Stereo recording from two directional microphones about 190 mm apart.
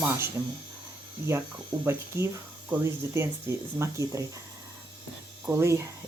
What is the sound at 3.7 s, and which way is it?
Speech, 15° right (ahead or behind).